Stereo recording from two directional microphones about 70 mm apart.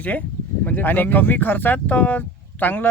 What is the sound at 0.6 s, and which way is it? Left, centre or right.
Speech, left.